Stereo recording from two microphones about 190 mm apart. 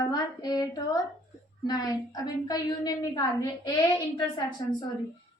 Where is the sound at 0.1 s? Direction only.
20° left (ahead or behind).